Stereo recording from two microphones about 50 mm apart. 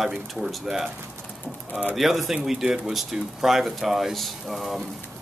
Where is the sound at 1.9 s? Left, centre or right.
Centre.